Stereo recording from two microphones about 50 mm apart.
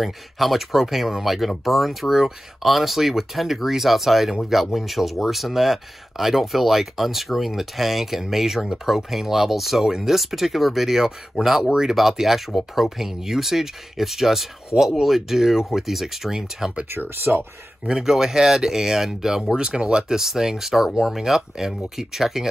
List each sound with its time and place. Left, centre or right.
0.0 s speech: centre
16.9 s speech: right
17.8 s speech: centre